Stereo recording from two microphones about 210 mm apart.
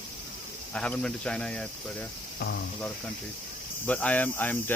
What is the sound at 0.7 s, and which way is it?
Speech, 5° left (ahead or behind).